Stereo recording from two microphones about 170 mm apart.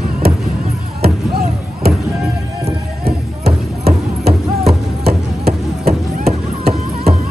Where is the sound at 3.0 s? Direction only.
70° right (ahead or behind).